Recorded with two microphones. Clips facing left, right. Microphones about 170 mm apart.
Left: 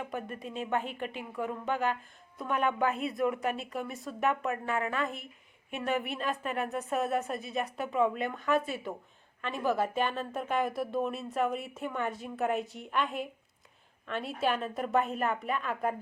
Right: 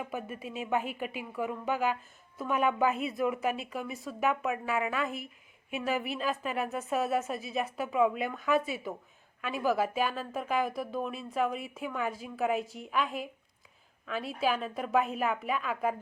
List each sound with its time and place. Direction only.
0.0 s a woman's voice: 5° right (ahead or behind)